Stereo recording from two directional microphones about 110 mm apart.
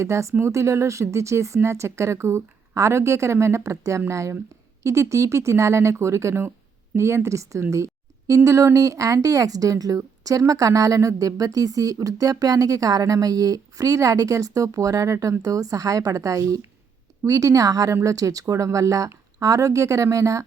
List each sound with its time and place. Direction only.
0.0 s a woman's voice: 25° right (ahead or behind)